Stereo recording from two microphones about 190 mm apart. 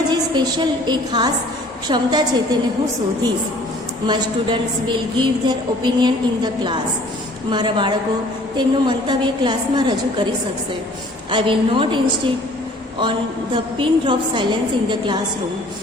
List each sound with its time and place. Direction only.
0.1 s a woman's voice: 25° right (ahead or behind)
4.0 s a woman's voice: 25° right (ahead or behind)
11.3 s a woman's voice: 25° right (ahead or behind)
13.0 s a woman's voice: 25° right (ahead or behind)